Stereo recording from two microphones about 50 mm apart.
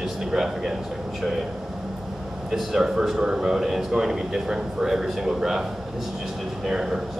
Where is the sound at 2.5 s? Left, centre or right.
Centre.